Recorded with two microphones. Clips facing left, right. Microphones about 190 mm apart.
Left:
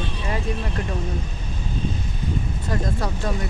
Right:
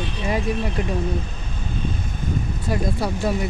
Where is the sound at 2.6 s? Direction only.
10° right (ahead or behind).